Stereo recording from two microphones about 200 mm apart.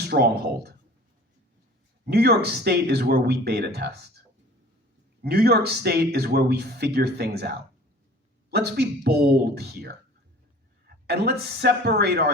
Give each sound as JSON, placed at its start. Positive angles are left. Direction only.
{"t": 0.0, "sound": "speech", "side_deg": -50}
{"t": 2.0, "sound": "speech", "side_deg": -50}
{"t": 5.2, "sound": "speech", "side_deg": -50}
{"t": 11.0, "sound": "speech", "side_deg": -55}